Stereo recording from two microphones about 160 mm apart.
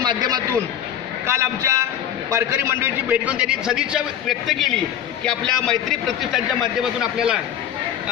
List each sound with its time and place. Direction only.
0.0 s a man's voice: 25° right (ahead or behind); by 7.3 s 5° right (ahead or behind)